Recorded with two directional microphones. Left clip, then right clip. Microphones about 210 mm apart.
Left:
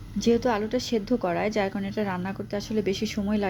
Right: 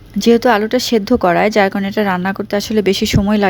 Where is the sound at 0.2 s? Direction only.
50° right (ahead or behind).